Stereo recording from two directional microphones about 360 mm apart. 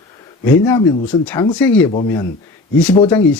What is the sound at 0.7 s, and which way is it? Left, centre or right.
Speech, centre.